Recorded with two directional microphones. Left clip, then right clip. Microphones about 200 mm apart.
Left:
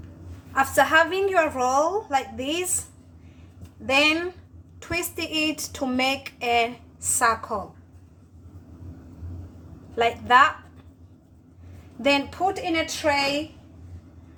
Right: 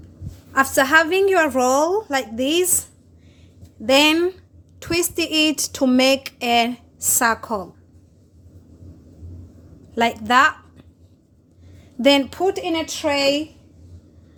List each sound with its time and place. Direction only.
0.5 s speech: 45° right (ahead or behind)
3.8 s speech: 45° right (ahead or behind)
9.9 s speech: 45° right (ahead or behind)
12.0 s speech: 45° right (ahead or behind)